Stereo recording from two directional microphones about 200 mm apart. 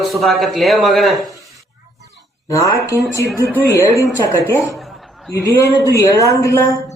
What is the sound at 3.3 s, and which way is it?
Speech, 15° right (ahead or behind).